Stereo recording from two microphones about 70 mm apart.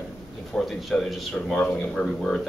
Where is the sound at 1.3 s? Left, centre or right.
Centre.